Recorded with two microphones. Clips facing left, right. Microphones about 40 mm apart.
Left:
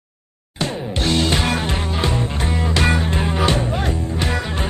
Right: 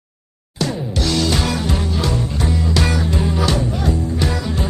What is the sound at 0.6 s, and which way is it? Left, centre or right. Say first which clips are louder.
Music: right 1 dB; left.